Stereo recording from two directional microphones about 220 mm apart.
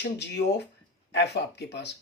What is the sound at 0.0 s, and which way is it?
Speech, 50° left (ahead or behind).